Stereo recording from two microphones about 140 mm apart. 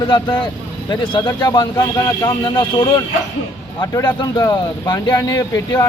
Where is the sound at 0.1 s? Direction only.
35° left (ahead or behind).